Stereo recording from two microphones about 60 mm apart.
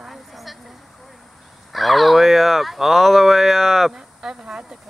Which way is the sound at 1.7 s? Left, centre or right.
Centre.